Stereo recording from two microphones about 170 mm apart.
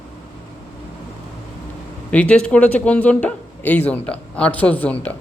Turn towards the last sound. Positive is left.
turn(degrees=10)  # may be behind; listen again after turning